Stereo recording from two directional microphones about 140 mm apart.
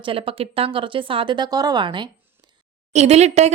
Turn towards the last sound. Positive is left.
turn(degrees=-50)  # may be behind; listen again after turning